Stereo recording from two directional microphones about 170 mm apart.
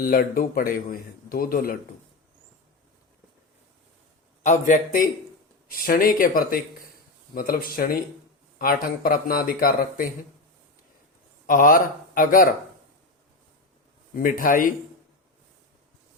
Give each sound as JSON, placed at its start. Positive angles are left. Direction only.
{"t": 0.0, "sound": "a man's voice", "side_deg": 55}
{"t": 4.4, "sound": "a man's voice", "side_deg": 50}
{"t": 11.4, "sound": "a man's voice", "side_deg": 55}
{"t": 14.2, "sound": "a man's voice", "side_deg": 55}